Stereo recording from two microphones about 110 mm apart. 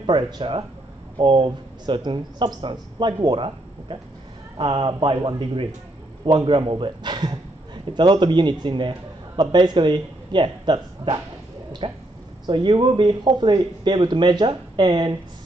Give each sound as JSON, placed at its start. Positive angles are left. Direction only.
{"t": 0.0, "sound": "speech", "side_deg": -50}